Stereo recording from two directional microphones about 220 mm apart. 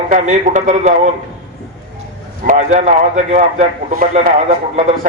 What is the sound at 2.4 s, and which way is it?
A man's voice, 35° right (ahead or behind).